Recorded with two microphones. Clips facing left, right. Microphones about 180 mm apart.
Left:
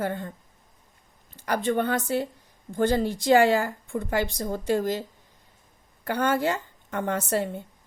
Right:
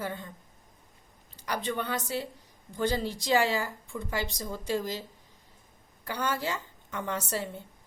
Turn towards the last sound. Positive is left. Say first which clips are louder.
# left 7 dB
turn(degrees=55)  # may be behind; listen again after turning